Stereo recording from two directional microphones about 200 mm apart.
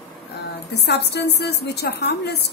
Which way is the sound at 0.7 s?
55° left (ahead or behind).